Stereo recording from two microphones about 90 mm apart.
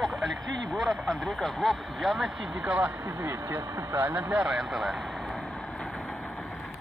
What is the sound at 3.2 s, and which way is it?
Speech, 30° right (ahead or behind).